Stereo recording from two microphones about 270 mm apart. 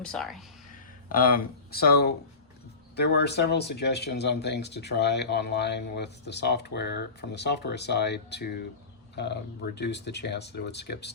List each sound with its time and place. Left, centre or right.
0.0 s speech: centre
1.0 s speech: left